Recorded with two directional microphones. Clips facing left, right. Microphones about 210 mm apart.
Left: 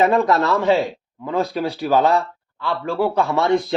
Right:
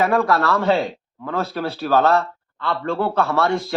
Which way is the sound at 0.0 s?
20° left (ahead or behind).